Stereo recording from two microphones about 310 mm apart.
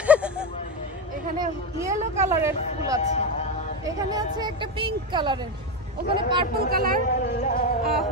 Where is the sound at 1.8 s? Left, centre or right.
Centre.